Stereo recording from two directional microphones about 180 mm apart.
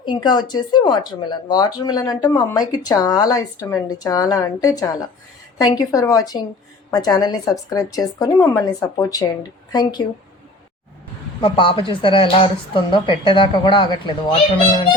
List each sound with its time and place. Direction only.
0.0 s speech: 25° left (ahead or behind)
11.3 s speech: 30° left (ahead or behind)